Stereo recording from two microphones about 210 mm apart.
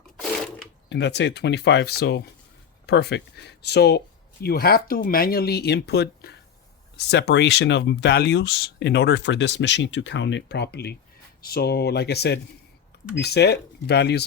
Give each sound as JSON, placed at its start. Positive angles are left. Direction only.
{"t": 0.2, "sound": "sewing machine", "side_deg": 0}
{"t": 0.9, "sound": "speech", "side_deg": 55}